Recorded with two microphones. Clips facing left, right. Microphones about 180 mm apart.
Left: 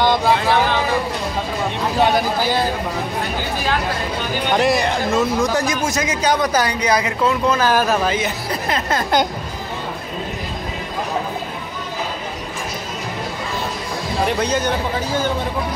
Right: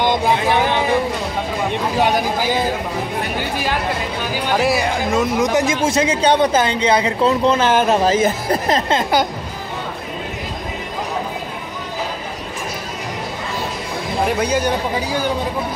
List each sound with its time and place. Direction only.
0.0 s vehicle: 20° right (ahead or behind)
2.0 s speech: 15° right (ahead or behind)
4.5 s speech: 5° right (ahead or behind)
5.4 s speech: 20° right (ahead or behind)
8.1 s speech: 45° right (ahead or behind)
14.2 s speech: 10° right (ahead or behind)